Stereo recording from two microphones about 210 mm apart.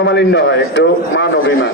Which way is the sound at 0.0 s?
55° left (ahead or behind).